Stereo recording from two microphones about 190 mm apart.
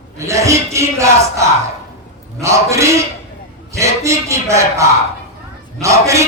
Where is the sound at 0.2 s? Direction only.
15° right (ahead or behind).